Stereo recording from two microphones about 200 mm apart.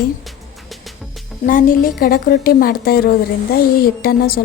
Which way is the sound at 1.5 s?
45° left (ahead or behind).